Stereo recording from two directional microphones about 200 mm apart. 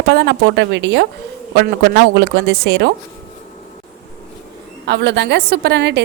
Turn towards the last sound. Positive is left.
turn(degrees=-60)  # may be behind; listen again after turning